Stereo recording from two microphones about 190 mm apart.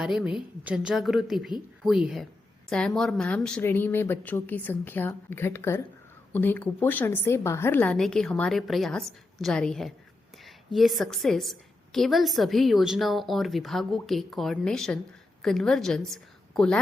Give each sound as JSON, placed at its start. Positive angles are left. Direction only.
{"t": 0.0, "sound": "a woman's voice", "side_deg": 0}